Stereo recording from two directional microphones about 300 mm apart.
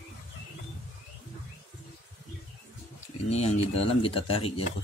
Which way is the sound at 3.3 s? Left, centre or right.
Left.